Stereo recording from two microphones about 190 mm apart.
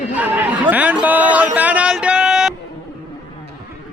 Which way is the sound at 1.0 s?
10° right (ahead or behind).